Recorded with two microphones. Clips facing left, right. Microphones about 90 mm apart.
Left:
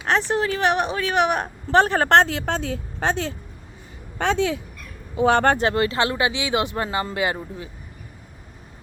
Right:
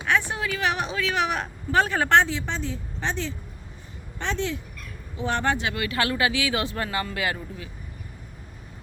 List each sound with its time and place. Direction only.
0.1 s speech: 70° left (ahead or behind)
0.7 s speech: 55° left (ahead or behind)
2.0 s a woman's voice: 65° left (ahead or behind)
4.2 s speech: 90° left
5.1 s speech: 65° left (ahead or behind)
5.5 s speech: 35° left (ahead or behind)